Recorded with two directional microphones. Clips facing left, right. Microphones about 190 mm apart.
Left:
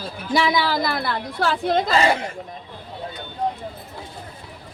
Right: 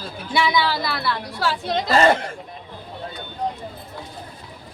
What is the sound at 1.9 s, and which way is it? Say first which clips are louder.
Speech: right 7 dB; 50° right (ahead or behind).